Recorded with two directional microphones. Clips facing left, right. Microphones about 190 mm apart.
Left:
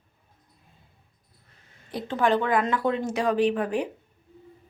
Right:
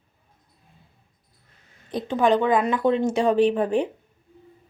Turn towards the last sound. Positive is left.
turn(degrees=-25)  # may be behind; listen again after turning